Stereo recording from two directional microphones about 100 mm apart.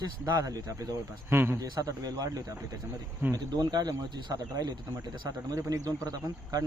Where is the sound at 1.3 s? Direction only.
25° right (ahead or behind).